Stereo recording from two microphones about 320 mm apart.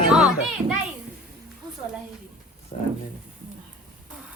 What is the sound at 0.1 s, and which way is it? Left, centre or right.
Music, centre.